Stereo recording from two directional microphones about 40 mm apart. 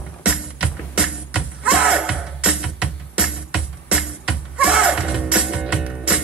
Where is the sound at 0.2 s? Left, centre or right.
Right.